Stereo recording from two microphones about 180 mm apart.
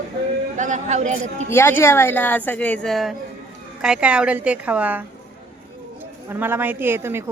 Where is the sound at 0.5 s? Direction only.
45° right (ahead or behind).